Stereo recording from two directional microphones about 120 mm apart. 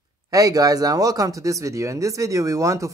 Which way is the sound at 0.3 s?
30° right (ahead or behind).